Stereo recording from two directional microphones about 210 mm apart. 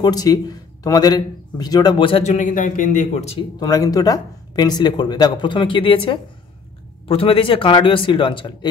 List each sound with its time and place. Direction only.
0.0 s speech: 20° left (ahead or behind)
3.5 s speech: 15° left (ahead or behind)